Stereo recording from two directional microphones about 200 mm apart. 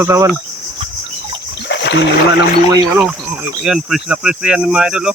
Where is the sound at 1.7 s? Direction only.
60° left (ahead or behind).